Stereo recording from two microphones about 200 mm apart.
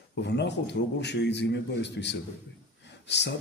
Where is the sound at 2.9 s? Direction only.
60° left (ahead or behind).